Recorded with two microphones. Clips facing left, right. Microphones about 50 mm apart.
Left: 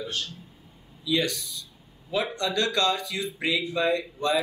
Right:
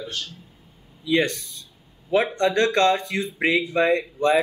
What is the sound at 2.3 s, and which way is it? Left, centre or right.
Speech, right.